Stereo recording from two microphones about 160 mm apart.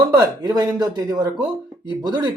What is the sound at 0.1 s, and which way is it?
Speech, 25° right (ahead or behind).